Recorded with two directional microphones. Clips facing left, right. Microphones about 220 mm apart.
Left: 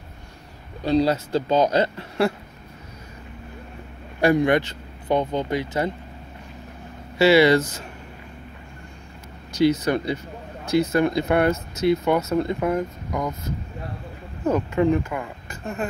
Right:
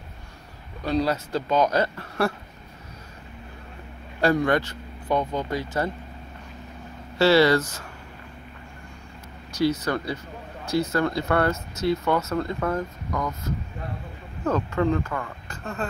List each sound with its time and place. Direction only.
0.8 s speech: 25° left (ahead or behind)
4.2 s speech: 20° left (ahead or behind)
7.2 s speech: 15° left (ahead or behind)
9.6 s speech: 20° left (ahead or behind)
14.4 s speech: 15° left (ahead or behind)